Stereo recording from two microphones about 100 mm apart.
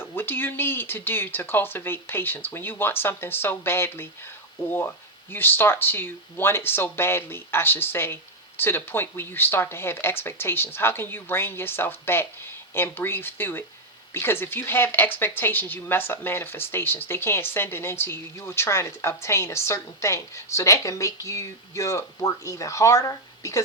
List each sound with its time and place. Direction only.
0.0 s speech: 20° left (ahead or behind)